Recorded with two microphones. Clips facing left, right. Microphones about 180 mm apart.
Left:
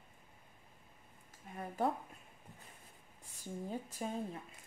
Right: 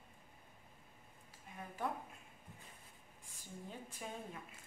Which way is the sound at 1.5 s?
40° left (ahead or behind).